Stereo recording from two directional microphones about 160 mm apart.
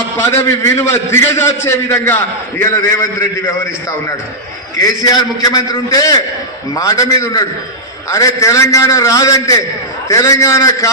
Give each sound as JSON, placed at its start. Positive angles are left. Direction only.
{"t": 0.2, "sound": "a man's voice", "side_deg": 20}
{"t": 4.7, "sound": "a man's voice", "side_deg": 25}